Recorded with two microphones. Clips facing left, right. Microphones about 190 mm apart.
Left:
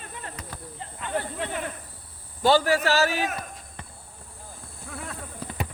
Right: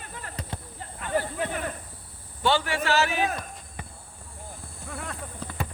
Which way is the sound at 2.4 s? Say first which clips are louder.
Left 4 dB; 40° left (ahead or behind).